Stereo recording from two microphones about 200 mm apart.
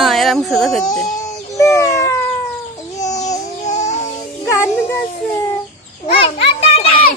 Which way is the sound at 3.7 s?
35° left (ahead or behind).